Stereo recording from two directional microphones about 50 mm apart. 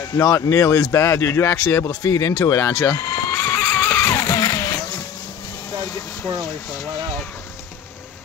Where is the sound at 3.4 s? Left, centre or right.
Left.